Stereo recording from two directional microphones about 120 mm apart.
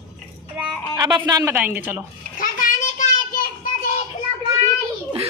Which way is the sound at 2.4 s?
90° left.